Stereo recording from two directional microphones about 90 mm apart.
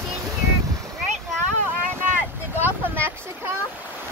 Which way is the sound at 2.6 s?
20° right (ahead or behind).